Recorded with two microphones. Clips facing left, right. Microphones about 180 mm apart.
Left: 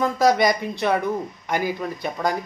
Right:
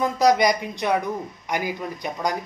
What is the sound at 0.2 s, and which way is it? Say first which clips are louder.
Speech: even; 20° right (ahead or behind).